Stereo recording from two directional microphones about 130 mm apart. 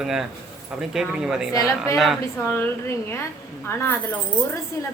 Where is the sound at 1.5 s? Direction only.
25° left (ahead or behind).